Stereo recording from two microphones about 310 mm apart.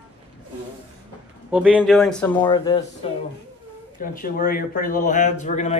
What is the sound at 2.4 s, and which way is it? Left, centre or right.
Speech, centre.